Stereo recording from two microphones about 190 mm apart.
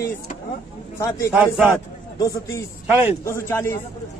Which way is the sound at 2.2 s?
20° left (ahead or behind).